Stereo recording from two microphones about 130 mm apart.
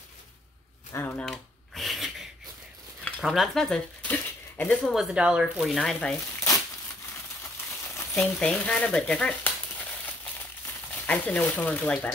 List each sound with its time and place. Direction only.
1.1 s a sound: 5° left (ahead or behind)
3.1 s speech: centre (ahead or behind)
4.9 s speech: 5° right (ahead or behind)
8.0 s frying: 20° left (ahead or behind)
8.4 s speech: 10° left (ahead or behind)
11.1 s speech: 10° left (ahead or behind)